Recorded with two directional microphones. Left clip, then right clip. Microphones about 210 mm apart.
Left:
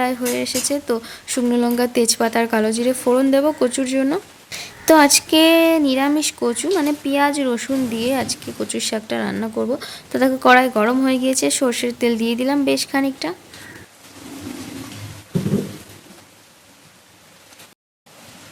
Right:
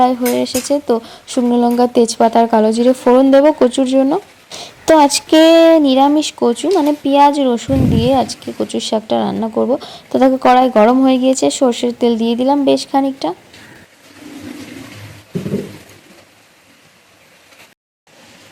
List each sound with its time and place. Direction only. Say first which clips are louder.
0.0 s speech: right 7 dB; 20° right (ahead or behind)
3.3 s speech: right 7 dB; centre (ahead or behind)
3.7 s speech: right 7 dB; 20° right (ahead or behind)
5.5 s a sound: right 7 dB; 10° left (ahead or behind)
5.7 s speech: right 7 dB; 20° right (ahead or behind)
9.6 s speech: right 7 dB; centre (ahead or behind)
9.8 s speech: right 5 dB; 20° right (ahead or behind)
10.2 s speech: right 5 dB; 5° left (ahead or behind)
10.5 s speech: right 3 dB; 20° right (ahead or behind)